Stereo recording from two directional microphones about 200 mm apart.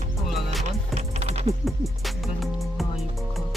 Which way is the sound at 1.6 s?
Centre (ahead or behind).